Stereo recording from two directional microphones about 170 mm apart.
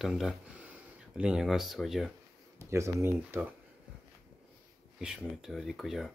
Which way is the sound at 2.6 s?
15° right (ahead or behind).